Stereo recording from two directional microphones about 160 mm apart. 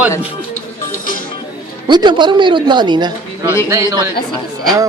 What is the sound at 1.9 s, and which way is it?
A woman's voice, 30° right (ahead or behind).